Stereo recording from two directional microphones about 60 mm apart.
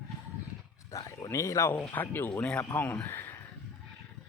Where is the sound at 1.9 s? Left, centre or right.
Left.